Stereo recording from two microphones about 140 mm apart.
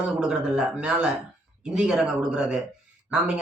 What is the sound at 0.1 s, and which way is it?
Speech, 5° right (ahead or behind).